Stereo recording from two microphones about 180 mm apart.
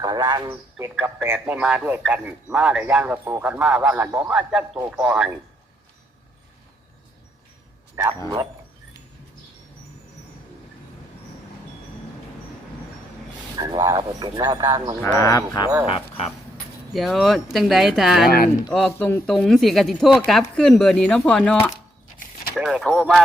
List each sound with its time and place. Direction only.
0.0 s a man's voice: 25° right (ahead or behind); by 5.3 s 5° right (ahead or behind)
8.0 s a man's voice: 10° right (ahead or behind)
13.8 s speech: 20° right (ahead or behind)
15.0 s speech: 15° left (ahead or behind)
15.9 s speech: 35° left (ahead or behind)
16.9 s speech: centre (ahead or behind)